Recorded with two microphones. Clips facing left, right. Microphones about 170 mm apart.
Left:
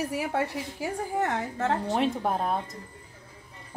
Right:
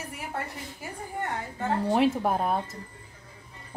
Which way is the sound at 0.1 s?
85° left.